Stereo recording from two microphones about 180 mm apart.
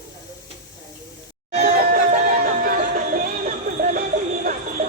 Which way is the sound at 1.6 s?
55° right (ahead or behind).